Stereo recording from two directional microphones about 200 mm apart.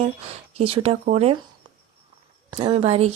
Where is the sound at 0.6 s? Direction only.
30° right (ahead or behind).